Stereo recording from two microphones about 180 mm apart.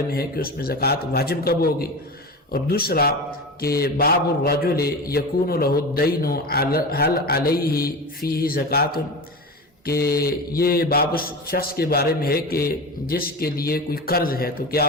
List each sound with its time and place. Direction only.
0.1 s a man's voice: 55° left (ahead or behind)